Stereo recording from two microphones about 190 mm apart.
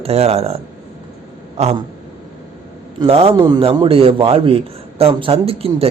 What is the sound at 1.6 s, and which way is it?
Speech, 35° right (ahead or behind).